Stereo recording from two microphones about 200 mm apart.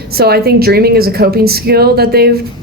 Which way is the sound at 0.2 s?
50° right (ahead or behind).